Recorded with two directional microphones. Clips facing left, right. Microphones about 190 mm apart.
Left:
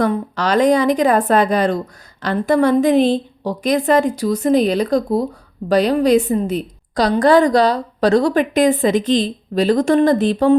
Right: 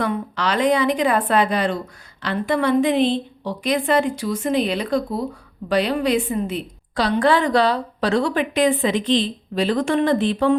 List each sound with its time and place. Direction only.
0.0 s a woman's voice: 40° left (ahead or behind)